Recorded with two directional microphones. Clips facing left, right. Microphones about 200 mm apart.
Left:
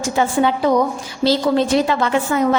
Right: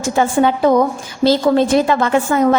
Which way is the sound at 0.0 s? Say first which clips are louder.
Right 3 dB; 50° right (ahead or behind).